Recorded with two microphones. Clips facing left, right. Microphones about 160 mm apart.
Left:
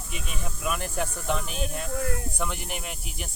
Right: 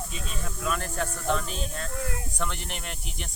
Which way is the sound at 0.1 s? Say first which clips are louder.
Even; 10° left (ahead or behind).